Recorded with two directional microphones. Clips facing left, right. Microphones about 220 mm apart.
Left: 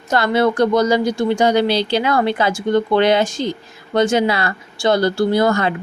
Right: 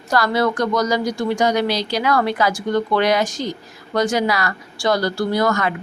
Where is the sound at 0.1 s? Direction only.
25° left (ahead or behind).